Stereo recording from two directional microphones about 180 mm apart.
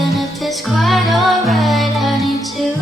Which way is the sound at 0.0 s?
Centre (ahead or behind).